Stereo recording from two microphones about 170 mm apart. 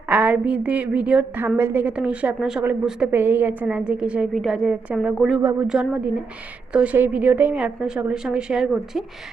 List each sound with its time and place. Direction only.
0.1 s a woman's voice: 10° right (ahead or behind)
5.4 s a woman's voice: 15° right (ahead or behind)